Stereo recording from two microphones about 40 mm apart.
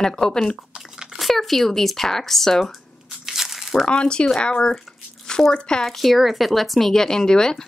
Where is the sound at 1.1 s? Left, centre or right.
Centre.